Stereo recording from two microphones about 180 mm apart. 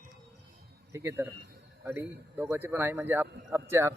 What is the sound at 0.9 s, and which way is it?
Speech, 15° right (ahead or behind).